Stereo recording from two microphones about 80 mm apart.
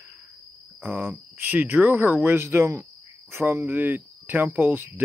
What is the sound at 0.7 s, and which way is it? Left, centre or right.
Speech, right.